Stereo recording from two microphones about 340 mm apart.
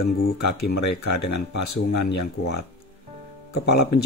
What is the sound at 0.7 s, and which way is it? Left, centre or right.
Speech, left.